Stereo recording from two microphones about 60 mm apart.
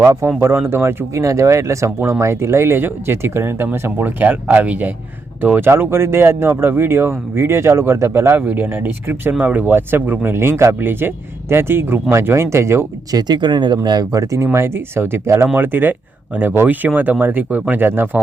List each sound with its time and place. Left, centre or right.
0.0 s speech: right
4.4 s speech: right
5.4 s speech: right
8.4 s speech: right
13.1 s speech: right